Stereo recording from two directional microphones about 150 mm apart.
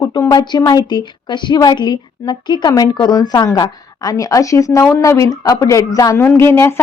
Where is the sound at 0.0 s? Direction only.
25° left (ahead or behind).